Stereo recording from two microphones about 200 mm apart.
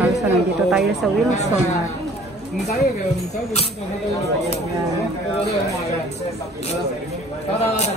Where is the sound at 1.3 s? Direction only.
35° left (ahead or behind).